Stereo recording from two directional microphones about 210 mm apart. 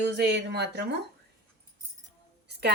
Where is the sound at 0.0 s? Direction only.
55° right (ahead or behind).